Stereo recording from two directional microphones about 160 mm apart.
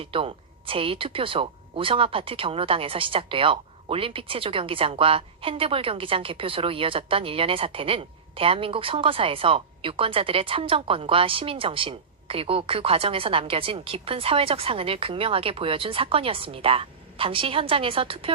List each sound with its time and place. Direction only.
0.0 s speech: 35° right (ahead or behind)